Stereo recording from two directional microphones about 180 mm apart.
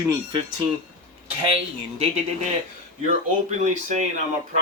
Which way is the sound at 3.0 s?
40° right (ahead or behind).